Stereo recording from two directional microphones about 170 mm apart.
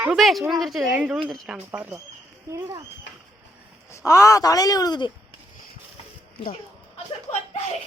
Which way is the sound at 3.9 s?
15° left (ahead or behind).